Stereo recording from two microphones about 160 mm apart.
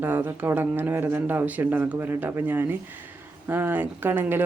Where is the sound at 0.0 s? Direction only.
10° right (ahead or behind).